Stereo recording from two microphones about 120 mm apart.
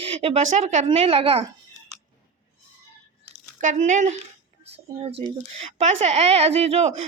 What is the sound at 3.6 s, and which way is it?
Speech, 90° right.